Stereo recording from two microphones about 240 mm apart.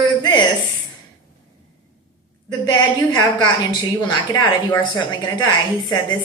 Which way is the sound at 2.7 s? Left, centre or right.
Centre.